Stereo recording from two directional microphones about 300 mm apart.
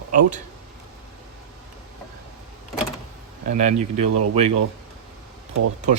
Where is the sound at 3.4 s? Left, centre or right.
Right.